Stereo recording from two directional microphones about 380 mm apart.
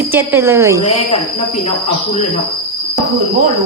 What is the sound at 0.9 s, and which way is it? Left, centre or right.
Speech, centre.